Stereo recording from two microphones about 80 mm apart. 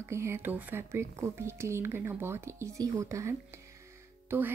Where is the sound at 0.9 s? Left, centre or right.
Right.